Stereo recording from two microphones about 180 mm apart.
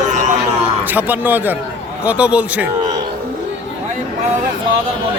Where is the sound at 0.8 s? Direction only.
10° right (ahead or behind).